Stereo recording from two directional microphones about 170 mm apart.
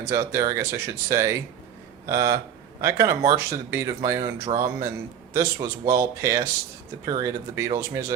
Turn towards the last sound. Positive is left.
turn(degrees=-15)  # may be behind; listen again after turning